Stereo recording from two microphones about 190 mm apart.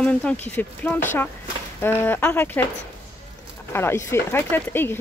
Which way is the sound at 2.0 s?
10° left (ahead or behind).